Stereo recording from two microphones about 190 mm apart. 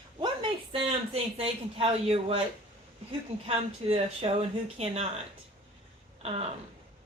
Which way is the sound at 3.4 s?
30° right (ahead or behind).